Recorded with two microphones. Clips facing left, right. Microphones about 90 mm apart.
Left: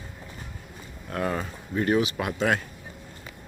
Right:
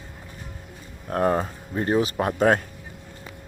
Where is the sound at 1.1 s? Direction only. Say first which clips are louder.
Right 6 dB; 40° right (ahead or behind).